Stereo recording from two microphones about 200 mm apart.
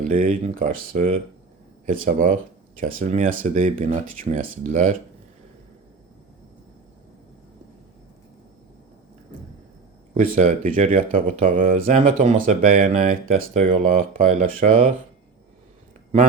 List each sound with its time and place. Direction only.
0.0 s speech: 40° right (ahead or behind)
10.2 s speech: 40° right (ahead or behind)